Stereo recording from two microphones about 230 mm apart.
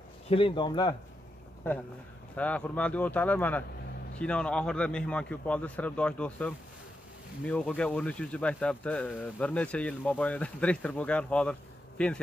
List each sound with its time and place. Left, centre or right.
0.3 s speech: left
2.3 s a man's voice: centre